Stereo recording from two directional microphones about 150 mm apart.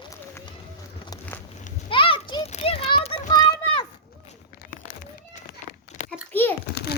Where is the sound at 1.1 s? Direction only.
25° left (ahead or behind).